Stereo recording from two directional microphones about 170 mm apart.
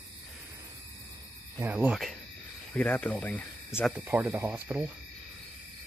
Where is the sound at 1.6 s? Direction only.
10° right (ahead or behind).